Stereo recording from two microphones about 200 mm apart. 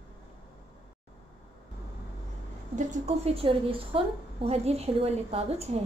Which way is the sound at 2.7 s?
35° right (ahead or behind).